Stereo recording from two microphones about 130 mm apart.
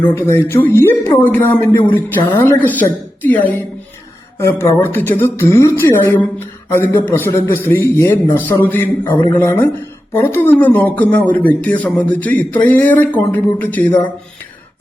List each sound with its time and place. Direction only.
0.1 s a man's voice: 15° left (ahead or behind)